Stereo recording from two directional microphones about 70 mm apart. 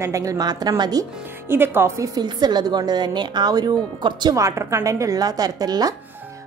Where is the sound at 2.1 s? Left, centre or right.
Right.